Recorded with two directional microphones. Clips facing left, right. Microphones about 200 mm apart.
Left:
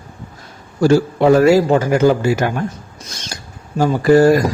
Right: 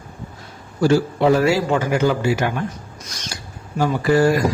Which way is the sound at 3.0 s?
25° left (ahead or behind).